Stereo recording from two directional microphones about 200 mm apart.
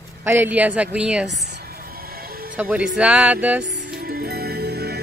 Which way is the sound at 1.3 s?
55° right (ahead or behind).